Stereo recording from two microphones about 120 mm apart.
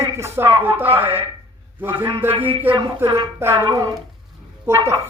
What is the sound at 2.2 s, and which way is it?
Speech, 20° right (ahead or behind).